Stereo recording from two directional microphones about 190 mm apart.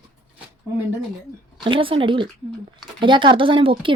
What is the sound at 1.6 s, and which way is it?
Speech, 25° right (ahead or behind).